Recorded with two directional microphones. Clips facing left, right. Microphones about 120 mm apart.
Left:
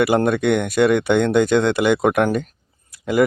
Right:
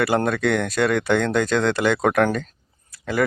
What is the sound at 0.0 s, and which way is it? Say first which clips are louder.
Speech: left 3 dB; 15° left (ahead or behind).